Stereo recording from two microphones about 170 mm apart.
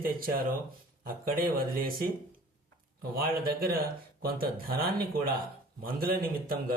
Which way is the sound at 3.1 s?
60° right (ahead or behind).